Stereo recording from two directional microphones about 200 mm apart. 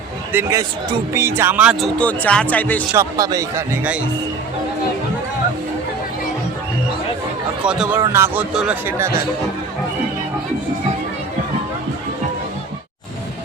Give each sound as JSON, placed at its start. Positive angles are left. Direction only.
{"t": 0.3, "sound": "speech", "side_deg": -15}
{"t": 2.0, "sound": "speech", "side_deg": 5}
{"t": 2.9, "sound": "speech", "side_deg": -15}
{"t": 7.6, "sound": "speech", "side_deg": -5}